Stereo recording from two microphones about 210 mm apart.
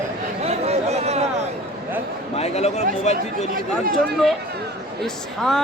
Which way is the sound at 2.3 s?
30° left (ahead or behind).